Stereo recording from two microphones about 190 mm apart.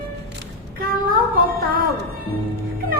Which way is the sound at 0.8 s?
50° right (ahead or behind).